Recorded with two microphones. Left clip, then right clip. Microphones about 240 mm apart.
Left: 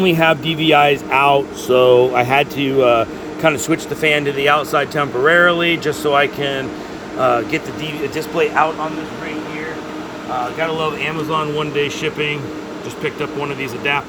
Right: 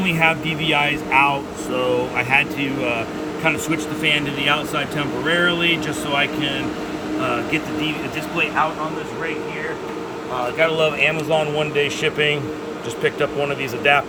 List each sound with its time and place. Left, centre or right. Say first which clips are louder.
0.0 s speech: left 4 dB; left
10.6 s speech: right 6 dB; centre